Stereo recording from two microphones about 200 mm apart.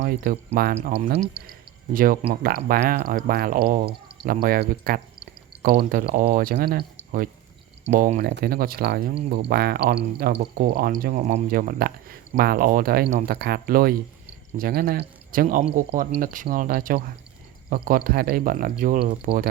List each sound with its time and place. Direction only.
0.0 s speech: 50° right (ahead or behind)
0.8 s speech: 35° right (ahead or behind)
1.5 s a sound: 45° right (ahead or behind)
2.3 s speech: 45° right (ahead or behind)